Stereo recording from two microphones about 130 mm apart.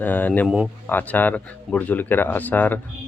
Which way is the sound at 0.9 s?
15° left (ahead or behind).